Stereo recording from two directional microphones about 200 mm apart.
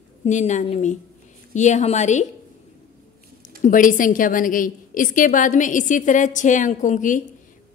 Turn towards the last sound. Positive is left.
turn(degrees=40)  # may be behind; listen again after turning